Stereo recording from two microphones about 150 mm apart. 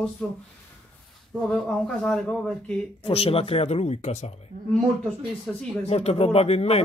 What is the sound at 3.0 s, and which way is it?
Speech, 40° left (ahead or behind).